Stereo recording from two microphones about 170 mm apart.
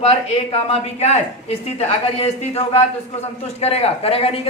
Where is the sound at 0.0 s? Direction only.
35° left (ahead or behind).